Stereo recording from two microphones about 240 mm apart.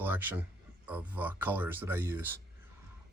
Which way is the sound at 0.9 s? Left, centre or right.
Centre.